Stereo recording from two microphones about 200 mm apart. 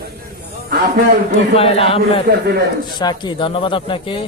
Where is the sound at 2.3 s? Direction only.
60° right (ahead or behind).